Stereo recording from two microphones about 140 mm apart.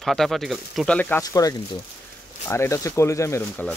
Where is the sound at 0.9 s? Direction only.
10° left (ahead or behind).